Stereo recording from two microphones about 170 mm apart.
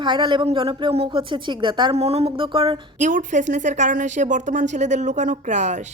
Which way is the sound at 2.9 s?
45° right (ahead or behind).